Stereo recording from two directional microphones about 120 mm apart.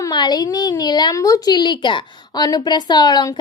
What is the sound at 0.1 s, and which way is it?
A woman's voice, 35° left (ahead or behind).